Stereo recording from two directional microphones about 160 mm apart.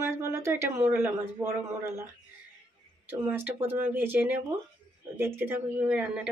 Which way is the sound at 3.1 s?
10° right (ahead or behind).